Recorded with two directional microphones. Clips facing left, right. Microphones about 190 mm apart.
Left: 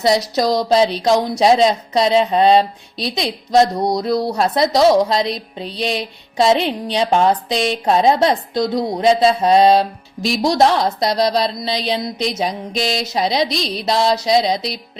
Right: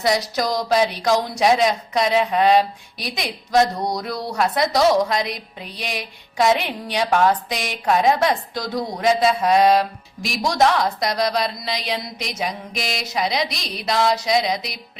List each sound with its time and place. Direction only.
0.0 s a woman's voice: 25° left (ahead or behind)
12.4 s music: 30° left (ahead or behind)